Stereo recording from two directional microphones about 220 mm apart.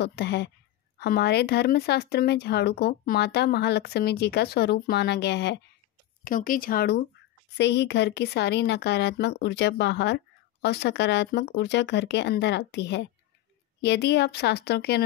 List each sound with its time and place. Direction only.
0.0 s speech: 50° left (ahead or behind)
6.2 s speech: 40° left (ahead or behind)